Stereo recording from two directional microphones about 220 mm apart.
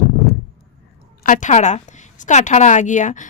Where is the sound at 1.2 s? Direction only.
35° left (ahead or behind).